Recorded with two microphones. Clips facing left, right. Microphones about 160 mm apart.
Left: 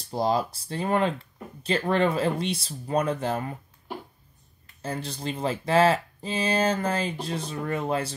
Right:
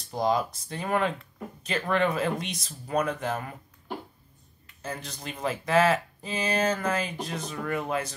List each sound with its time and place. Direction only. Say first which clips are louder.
0.1 s speech: left 1 dB; 30° left (ahead or behind)
4.8 s speech: left 5 dB; 30° left (ahead or behind)